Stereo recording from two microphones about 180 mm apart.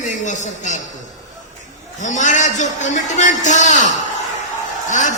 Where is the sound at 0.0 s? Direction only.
45° left (ahead or behind).